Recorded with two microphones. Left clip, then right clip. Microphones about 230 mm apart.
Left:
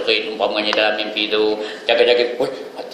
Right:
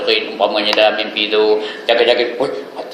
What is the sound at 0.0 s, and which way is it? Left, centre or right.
A man's voice, centre.